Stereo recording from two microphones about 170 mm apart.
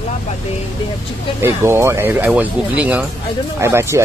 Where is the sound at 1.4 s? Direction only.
15° right (ahead or behind).